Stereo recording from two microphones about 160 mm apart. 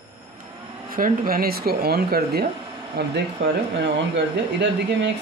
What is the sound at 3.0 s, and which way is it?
Speech, 90° right.